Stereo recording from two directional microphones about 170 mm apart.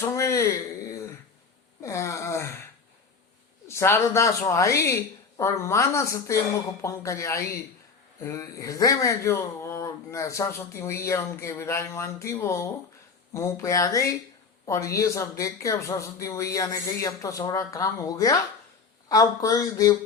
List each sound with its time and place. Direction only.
0.0 s a sound: 20° left (ahead or behind)
1.8 s gasp: 15° left (ahead or behind)
3.7 s speech: 15° left (ahead or behind)